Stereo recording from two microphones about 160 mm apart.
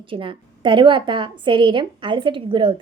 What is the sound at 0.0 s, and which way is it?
A woman's voice, 35° right (ahead or behind).